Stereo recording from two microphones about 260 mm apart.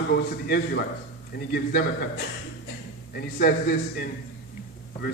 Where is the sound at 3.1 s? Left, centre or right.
Left.